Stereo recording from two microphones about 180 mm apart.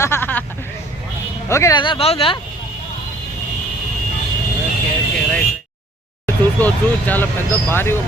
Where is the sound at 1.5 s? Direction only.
15° left (ahead or behind); by 2.3 s 35° left (ahead or behind).